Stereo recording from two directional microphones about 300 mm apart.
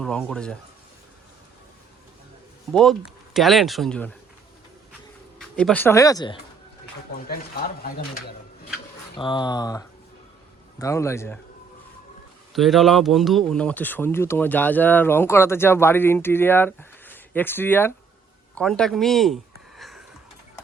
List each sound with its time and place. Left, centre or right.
0.0 s speech: centre
3.3 s speech: centre
5.4 s speech: centre
7.8 s speech: left
9.1 s speech: centre
12.5 s speech: centre
18.5 s a sound: centre